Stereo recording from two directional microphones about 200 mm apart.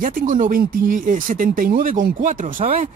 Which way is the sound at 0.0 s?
40° right (ahead or behind).